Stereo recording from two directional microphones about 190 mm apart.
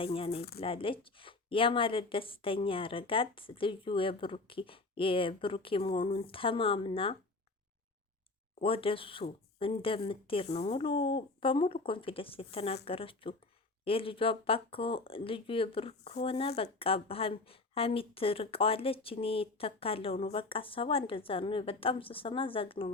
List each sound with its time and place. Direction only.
0.0 s speech: 30° left (ahead or behind)
8.6 s speech: 30° left (ahead or behind)